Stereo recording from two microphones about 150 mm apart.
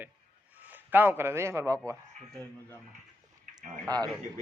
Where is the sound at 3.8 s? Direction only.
25° right (ahead or behind).